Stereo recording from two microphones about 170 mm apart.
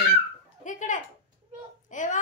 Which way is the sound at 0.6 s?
50° left (ahead or behind).